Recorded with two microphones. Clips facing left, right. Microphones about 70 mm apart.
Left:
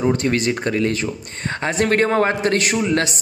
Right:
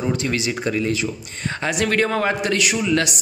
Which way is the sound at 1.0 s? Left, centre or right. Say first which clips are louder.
Left 1 dB; left.